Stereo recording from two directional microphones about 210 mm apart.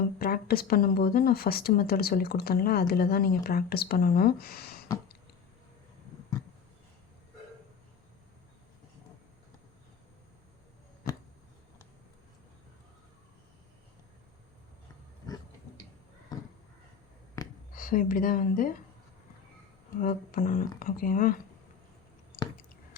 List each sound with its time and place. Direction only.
0.2 s speech: 45° left (ahead or behind)
17.7 s speech: 40° left (ahead or behind)
20.0 s speech: 40° left (ahead or behind)